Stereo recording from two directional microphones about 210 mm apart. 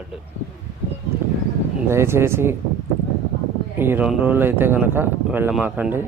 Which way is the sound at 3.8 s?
10° right (ahead or behind).